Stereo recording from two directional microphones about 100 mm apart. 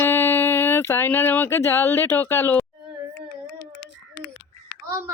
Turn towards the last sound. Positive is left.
turn(degrees=-25)  # may be behind; listen again after turning